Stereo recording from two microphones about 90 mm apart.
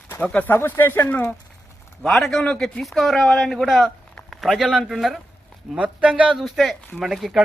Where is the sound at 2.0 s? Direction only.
5° left (ahead or behind).